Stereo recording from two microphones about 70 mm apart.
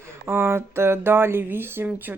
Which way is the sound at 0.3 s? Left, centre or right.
Right.